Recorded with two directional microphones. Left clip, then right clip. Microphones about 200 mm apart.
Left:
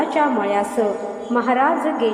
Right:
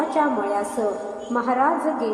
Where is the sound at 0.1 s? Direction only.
40° left (ahead or behind).